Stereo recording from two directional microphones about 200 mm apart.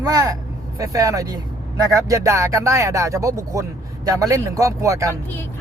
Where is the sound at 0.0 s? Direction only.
15° right (ahead or behind).